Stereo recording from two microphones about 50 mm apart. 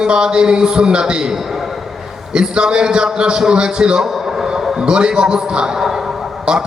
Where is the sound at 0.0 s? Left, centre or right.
Centre.